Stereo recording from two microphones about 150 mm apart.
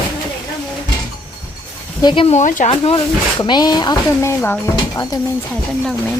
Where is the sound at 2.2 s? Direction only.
55° left (ahead or behind).